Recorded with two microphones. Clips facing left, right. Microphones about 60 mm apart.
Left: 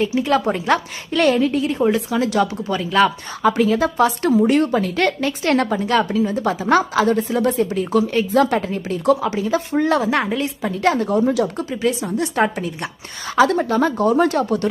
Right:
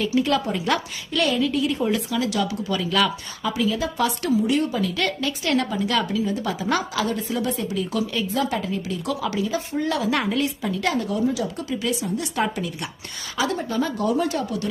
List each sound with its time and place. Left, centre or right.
0.0 s speech: left
0.3 s a woman's voice: left
3.4 s a woman's voice: left
8.3 s a woman's voice: left
11.3 s a woman's voice: left
11.7 s a woman's voice: left
13.3 s a woman's voice: left
14.2 s a woman's voice: left